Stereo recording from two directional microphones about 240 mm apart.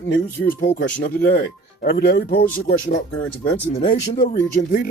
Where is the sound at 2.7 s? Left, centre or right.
Left.